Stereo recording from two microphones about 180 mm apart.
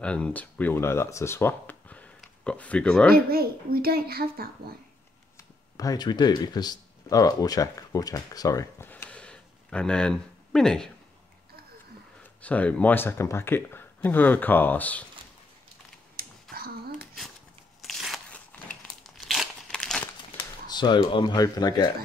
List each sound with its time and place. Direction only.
0.0 s speech: 5° left (ahead or behind)
3.3 s a child's voice: 55° right (ahead or behind)
5.4 s speech: 20° left (ahead or behind); by 10.9 s 5° left (ahead or behind)
12.2 s speech: 10° left (ahead or behind)
16.2 s a sound: 55° right (ahead or behind)
17.8 s crumpling: centre (ahead or behind)
20.6 s speech: 25° left (ahead or behind)